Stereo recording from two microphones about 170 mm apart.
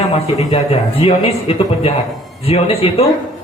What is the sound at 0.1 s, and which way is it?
Speech, 35° left (ahead or behind).